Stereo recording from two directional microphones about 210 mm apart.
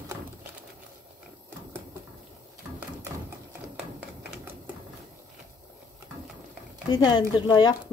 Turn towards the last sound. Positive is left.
turn(degrees=20)  # may be behind; listen again after turning